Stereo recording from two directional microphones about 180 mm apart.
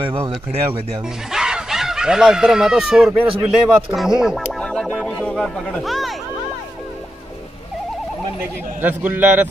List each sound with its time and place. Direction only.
0.0 s speech: 30° right (ahead or behind)
1.3 s speech: 5° right (ahead or behind)
8.8 s a man's voice: 10° right (ahead or behind)